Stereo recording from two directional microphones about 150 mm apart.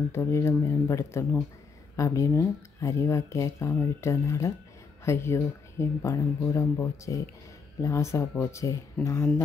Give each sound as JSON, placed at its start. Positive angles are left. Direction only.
{"t": 0.1, "sound": "speech", "side_deg": 20}